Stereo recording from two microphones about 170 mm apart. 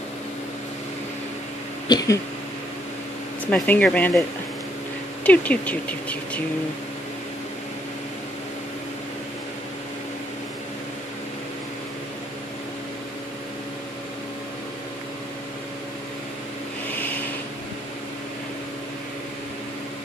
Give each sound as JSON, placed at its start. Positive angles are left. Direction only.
{"t": 1.9, "sound": "speech", "side_deg": 25}
{"t": 3.4, "sound": "speech", "side_deg": 5}
{"t": 5.2, "sound": "speech", "side_deg": 10}
{"t": 16.9, "sound": "vehicle", "side_deg": 10}